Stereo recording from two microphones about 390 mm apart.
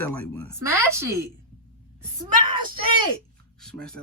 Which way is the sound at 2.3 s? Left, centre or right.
Right.